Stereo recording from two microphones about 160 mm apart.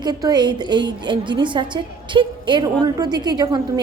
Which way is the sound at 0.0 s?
25° right (ahead or behind).